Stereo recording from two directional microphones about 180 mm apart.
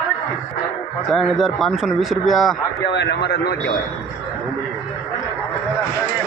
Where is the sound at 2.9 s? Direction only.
70° left (ahead or behind).